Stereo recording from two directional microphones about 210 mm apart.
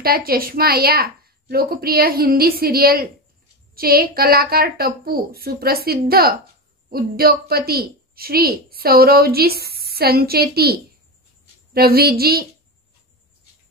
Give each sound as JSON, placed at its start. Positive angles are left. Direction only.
{"t": 0.0, "sound": "a woman's voice", "side_deg": -45}